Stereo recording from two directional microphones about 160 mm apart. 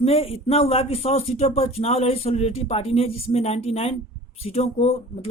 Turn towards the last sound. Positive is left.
turn(degrees=40)  # may be behind; listen again after turning